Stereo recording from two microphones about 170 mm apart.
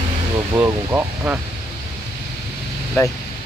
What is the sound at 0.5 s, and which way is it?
Speech, 15° right (ahead or behind).